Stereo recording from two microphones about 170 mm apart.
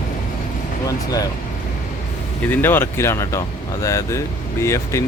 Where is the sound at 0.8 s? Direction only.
20° left (ahead or behind).